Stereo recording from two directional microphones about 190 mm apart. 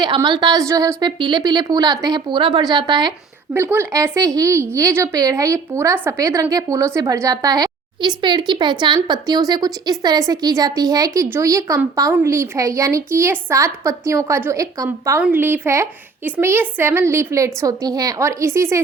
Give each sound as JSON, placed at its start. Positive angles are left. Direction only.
{"t": 0.0, "sound": "a woman's voice", "side_deg": -25}
{"t": 3.5, "sound": "a woman's voice", "side_deg": -10}